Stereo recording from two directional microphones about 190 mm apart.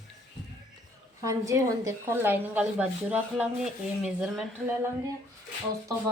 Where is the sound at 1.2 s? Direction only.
15° right (ahead or behind).